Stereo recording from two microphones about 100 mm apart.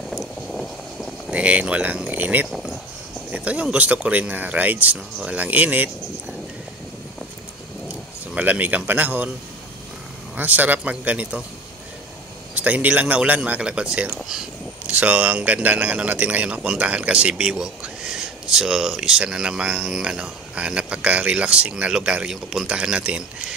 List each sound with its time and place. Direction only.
0.1 s vehicle: centre (ahead or behind)
1.3 s speech: 15° right (ahead or behind)
2.5 s a sound: centre (ahead or behind)
3.3 s speech: 15° right (ahead or behind)
8.4 s speech: 15° right (ahead or behind)
10.3 s speech: 15° right (ahead or behind)
12.5 s speech: 15° right (ahead or behind)